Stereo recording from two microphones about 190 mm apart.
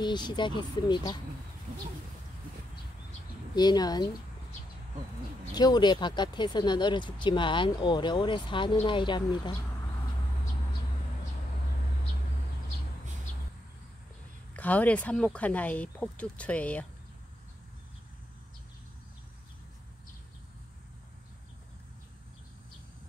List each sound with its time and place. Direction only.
0.0 s speech: 25° left (ahead or behind)
3.5 s speech: 20° left (ahead or behind)
5.5 s speech: 20° left (ahead or behind)
14.5 s speech: 10° left (ahead or behind)